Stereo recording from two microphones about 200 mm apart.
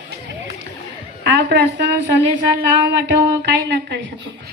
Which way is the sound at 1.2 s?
55° right (ahead or behind).